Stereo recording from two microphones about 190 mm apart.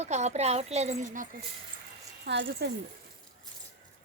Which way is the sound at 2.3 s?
60° right (ahead or behind).